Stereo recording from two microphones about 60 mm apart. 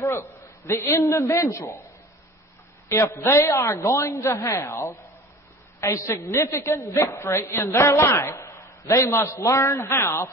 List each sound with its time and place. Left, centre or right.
0.0 s a man's voice: left
3.1 s a woman's voice: left
5.9 s a man's voice: left